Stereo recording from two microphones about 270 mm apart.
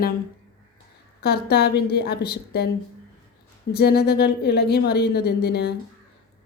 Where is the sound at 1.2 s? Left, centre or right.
Left.